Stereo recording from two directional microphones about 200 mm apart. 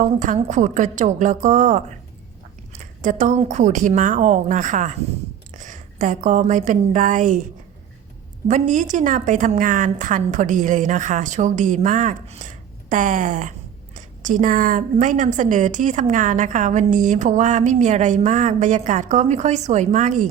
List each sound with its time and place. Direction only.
0.2 s a woman's voice: 40° right (ahead or behind)
3.0 s a woman's voice: 40° right (ahead or behind)
8.4 s a woman's voice: 40° right (ahead or behind)